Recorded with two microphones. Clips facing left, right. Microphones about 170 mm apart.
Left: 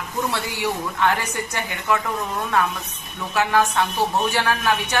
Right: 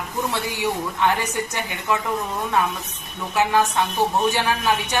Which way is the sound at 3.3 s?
20° right (ahead or behind).